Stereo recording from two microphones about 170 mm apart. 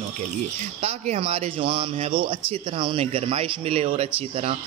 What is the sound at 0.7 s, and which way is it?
Speech, 40° right (ahead or behind).